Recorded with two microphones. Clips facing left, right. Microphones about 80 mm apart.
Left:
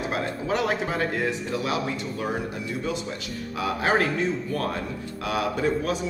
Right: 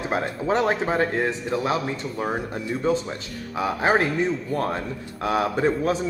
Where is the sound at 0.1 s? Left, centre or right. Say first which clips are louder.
Right 6 dB; right.